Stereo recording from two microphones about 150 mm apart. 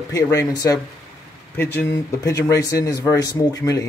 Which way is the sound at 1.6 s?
15° left (ahead or behind).